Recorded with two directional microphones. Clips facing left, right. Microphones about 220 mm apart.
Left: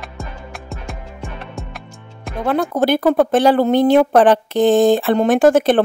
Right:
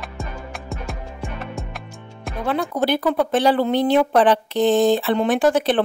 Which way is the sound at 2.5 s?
45° left (ahead or behind).